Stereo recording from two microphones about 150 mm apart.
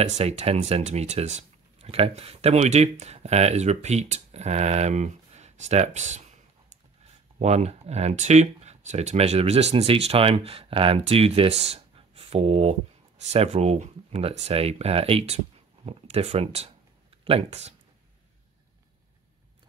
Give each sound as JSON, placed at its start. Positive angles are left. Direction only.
{"t": 0.0, "sound": "speech", "side_deg": -45}
{"t": 7.3, "sound": "speech", "side_deg": -45}